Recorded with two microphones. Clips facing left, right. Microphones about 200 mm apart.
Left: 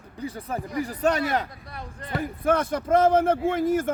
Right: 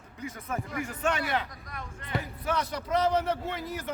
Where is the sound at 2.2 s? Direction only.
50° left (ahead or behind).